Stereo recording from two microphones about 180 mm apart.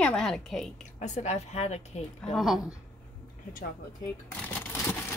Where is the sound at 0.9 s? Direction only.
40° left (ahead or behind).